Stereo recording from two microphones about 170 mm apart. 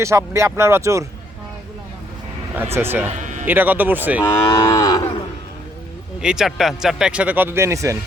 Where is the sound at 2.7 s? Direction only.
10° right (ahead or behind).